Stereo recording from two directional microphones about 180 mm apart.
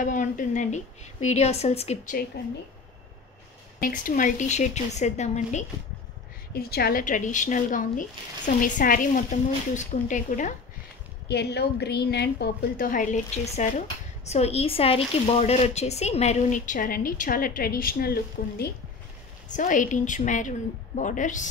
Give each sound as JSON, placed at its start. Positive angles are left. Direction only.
{"t": 0.0, "sound": "a woman's voice", "side_deg": 45}
{"t": 3.8, "sound": "a woman's voice", "side_deg": 50}
{"t": 6.5, "sound": "speech", "side_deg": 60}
{"t": 11.2, "sound": "a woman's voice", "side_deg": 65}
{"t": 19.5, "sound": "speech", "side_deg": 45}